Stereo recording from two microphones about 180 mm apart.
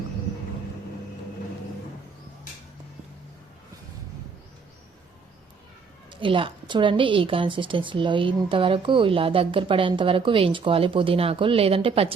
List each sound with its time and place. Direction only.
6.1 s a woman's voice: 30° right (ahead or behind)